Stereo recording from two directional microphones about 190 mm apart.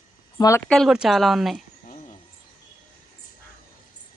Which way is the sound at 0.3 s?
15° left (ahead or behind).